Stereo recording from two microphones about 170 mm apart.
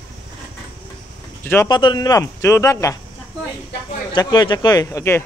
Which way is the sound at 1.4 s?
10° left (ahead or behind).